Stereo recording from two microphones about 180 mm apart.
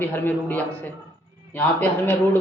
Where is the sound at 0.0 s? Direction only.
10° left (ahead or behind).